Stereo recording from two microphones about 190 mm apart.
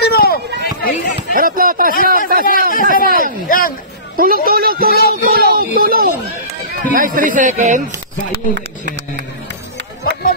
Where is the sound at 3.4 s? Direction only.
45° left (ahead or behind).